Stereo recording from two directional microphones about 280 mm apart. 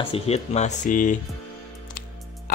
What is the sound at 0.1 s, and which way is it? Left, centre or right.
Speech, left.